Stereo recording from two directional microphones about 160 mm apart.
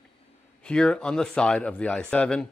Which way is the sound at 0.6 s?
5° left (ahead or behind).